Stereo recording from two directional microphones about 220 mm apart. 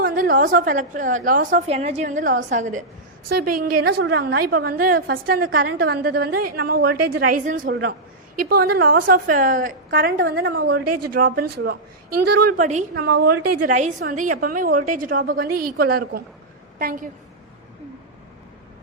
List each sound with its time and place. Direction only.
0.0 s a woman's voice: 40° right (ahead or behind)
10.8 s speech: 90° right
11.1 s a woman's voice: 40° right (ahead or behind)
12.9 s a woman's voice: 50° right (ahead or behind)
13.6 s a woman's voice: 35° right (ahead or behind)